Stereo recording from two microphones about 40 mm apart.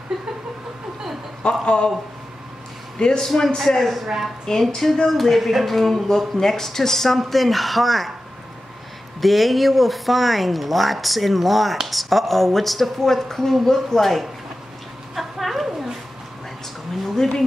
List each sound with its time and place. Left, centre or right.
1.4 s speech: left
3.0 s a man's voice: centre
3.3 s speech: centre
9.2 s speech: centre
15.1 s a sound: centre